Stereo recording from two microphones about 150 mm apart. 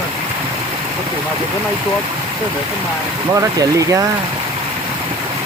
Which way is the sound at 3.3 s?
20° right (ahead or behind).